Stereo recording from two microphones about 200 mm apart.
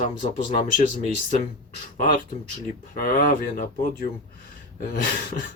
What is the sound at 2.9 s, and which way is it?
Speech, 40° left (ahead or behind).